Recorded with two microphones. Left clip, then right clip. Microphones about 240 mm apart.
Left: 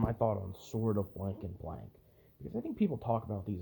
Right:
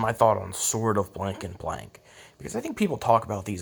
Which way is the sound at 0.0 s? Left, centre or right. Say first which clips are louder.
Right 12 dB; centre.